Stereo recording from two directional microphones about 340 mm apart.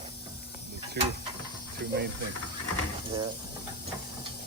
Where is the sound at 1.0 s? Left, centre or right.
Right.